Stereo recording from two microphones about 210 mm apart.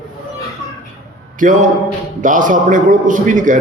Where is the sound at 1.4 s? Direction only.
40° right (ahead or behind).